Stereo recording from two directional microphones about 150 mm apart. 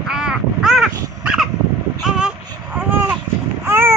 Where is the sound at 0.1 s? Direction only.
5° right (ahead or behind).